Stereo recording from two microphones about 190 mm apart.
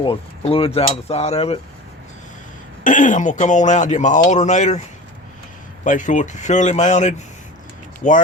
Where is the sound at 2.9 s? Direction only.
40° left (ahead or behind).